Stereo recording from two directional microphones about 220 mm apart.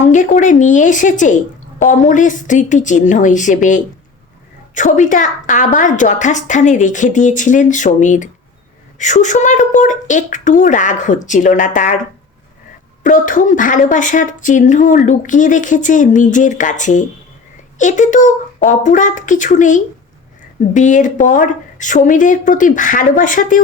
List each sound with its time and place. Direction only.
0.0 s speech: 35° left (ahead or behind)
13.0 s speech: 35° left (ahead or behind)